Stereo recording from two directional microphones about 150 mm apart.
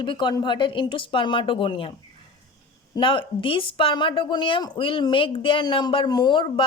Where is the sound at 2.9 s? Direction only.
35° left (ahead or behind).